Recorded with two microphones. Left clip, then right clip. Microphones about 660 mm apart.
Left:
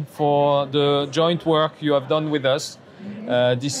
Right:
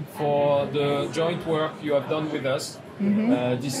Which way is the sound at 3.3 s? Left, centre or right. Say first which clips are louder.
Left 7 dB; left.